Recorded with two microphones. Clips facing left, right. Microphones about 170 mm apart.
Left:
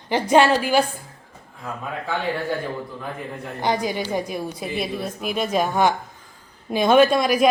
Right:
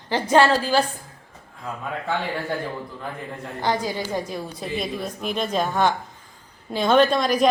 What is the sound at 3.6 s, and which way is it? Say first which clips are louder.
A woman's voice: left 2 dB; 15° left (ahead or behind).